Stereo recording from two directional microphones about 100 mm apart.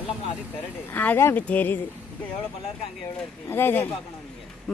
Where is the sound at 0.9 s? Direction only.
20° left (ahead or behind).